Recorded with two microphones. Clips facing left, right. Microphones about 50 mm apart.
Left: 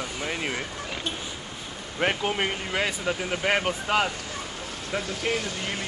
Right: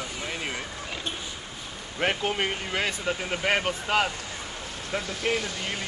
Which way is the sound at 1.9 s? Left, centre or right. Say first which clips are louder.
Left 1 dB; centre.